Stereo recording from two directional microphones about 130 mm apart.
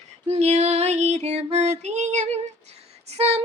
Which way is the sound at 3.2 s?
50° right (ahead or behind).